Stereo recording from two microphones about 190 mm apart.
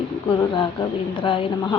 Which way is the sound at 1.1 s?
25° left (ahead or behind).